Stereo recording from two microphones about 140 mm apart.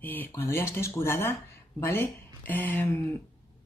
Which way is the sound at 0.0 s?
15° left (ahead or behind).